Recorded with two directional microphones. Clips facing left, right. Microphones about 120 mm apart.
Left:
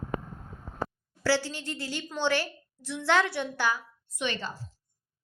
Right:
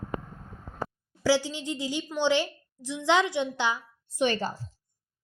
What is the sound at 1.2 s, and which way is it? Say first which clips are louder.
Speech: right 3 dB; 15° right (ahead or behind).